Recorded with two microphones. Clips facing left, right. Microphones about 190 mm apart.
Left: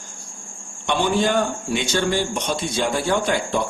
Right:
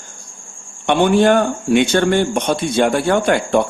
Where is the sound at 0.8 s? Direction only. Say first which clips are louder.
Right 8 dB; 60° right (ahead or behind).